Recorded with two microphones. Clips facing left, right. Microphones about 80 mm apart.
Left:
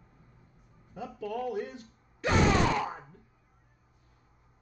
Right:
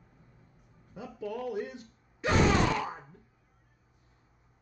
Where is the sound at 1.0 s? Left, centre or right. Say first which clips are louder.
Left 2 dB; left.